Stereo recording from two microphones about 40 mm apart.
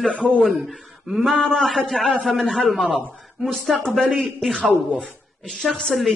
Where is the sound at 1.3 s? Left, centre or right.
Centre.